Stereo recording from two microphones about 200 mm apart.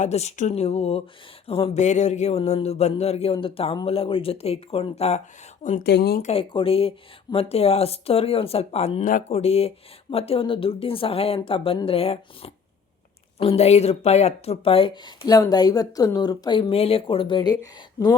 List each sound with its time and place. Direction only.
0.0 s speech: 35° left (ahead or behind)
5.8 s speech: 50° left (ahead or behind)
6.2 s speech: 25° left (ahead or behind)